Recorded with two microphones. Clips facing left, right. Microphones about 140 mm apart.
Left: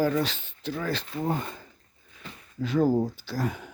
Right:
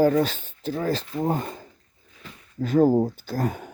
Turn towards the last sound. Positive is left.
turn(degrees=-45)  # may be behind; listen again after turning